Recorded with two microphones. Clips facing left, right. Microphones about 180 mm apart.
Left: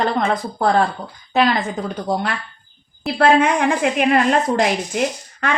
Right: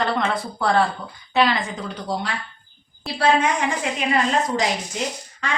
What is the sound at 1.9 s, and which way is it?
Speech, 55° left (ahead or behind).